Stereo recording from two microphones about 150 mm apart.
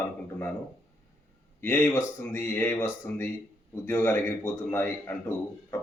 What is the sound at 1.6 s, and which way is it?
Speech, 15° left (ahead or behind).